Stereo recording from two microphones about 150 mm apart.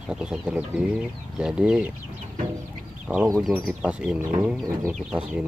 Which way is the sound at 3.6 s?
5° right (ahead or behind).